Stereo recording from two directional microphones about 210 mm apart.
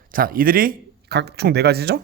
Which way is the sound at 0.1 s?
45° right (ahead or behind).